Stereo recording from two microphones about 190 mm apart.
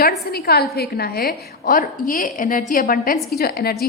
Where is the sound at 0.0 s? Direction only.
55° left (ahead or behind).